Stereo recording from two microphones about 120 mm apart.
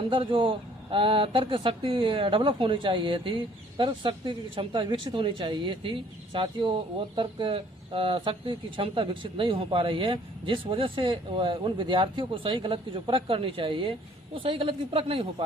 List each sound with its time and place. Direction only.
0.1 s speech: 45° right (ahead or behind)